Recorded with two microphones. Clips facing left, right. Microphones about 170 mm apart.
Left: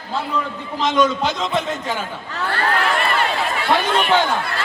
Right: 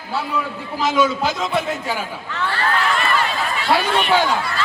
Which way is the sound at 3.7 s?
10° right (ahead or behind).